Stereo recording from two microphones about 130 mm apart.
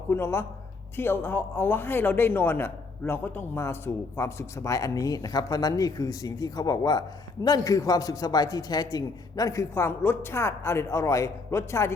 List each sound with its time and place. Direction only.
0.1 s a man's voice: 20° left (ahead or behind)